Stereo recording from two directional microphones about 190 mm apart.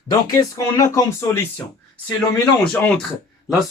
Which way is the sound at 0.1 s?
15° left (ahead or behind).